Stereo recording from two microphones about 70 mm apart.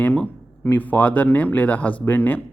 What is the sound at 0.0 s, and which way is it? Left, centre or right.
Speech, left.